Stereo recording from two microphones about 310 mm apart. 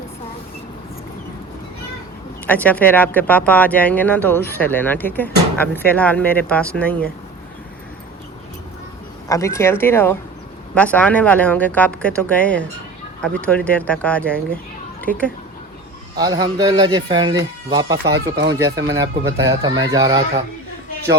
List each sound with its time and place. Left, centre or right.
2.5 s speech: centre
9.3 s speech: centre
16.1 s a man's voice: centre
17.9 s speech: right
18.9 s a man's voice: centre